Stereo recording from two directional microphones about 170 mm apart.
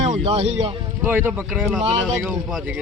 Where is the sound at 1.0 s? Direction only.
10° right (ahead or behind).